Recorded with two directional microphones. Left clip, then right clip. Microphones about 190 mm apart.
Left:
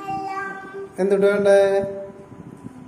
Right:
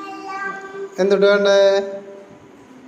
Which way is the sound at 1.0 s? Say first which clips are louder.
Right 4 dB; 15° left (ahead or behind).